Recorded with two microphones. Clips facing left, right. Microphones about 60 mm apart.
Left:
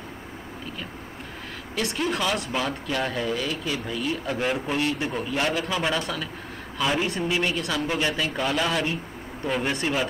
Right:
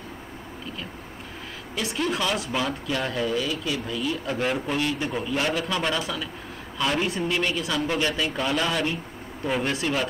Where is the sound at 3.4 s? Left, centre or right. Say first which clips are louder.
Even; left.